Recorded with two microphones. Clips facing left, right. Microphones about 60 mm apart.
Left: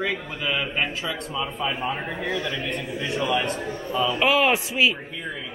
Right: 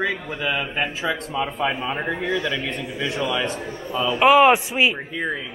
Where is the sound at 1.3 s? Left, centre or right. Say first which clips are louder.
Right 4 dB; right.